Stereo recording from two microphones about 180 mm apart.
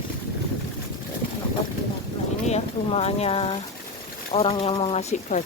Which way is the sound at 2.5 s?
35° left (ahead or behind).